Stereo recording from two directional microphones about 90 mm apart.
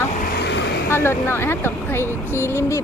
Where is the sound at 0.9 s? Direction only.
25° left (ahead or behind).